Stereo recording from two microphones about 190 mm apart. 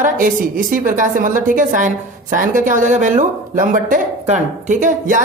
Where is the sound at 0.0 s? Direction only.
45° right (ahead or behind).